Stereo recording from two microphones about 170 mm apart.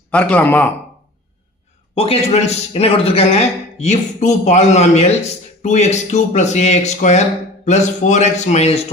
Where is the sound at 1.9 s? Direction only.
35° left (ahead or behind).